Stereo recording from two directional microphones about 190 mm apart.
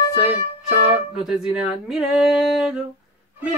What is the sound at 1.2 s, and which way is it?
Speech, centre (ahead or behind).